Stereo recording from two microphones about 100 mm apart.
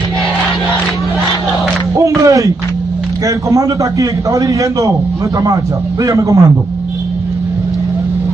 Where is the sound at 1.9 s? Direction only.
30° right (ahead or behind).